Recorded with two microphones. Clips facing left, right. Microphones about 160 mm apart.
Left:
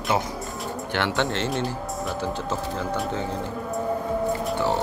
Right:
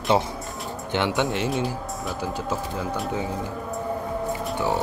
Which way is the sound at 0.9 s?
15° right (ahead or behind).